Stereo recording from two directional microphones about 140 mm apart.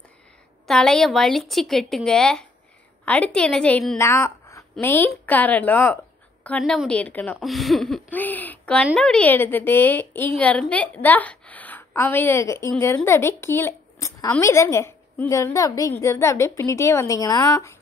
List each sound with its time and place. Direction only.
0.7 s a woman's voice: 5° left (ahead or behind)
4.0 s a sound: 20° left (ahead or behind)
4.7 s a woman's voice: 15° left (ahead or behind)
7.4 s a woman's voice: centre (ahead or behind); by 17.7 s 20° left (ahead or behind)